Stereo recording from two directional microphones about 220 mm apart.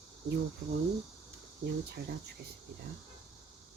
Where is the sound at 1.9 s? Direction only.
50° right (ahead or behind).